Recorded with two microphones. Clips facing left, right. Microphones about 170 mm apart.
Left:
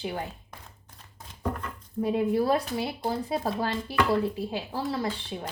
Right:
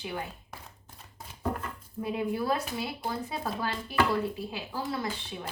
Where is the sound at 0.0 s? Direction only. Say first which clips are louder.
Left 3 dB; 35° left (ahead or behind).